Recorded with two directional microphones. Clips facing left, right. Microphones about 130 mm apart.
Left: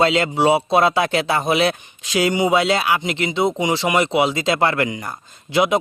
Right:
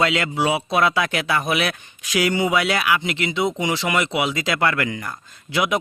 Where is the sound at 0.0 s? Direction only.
25° left (ahead or behind).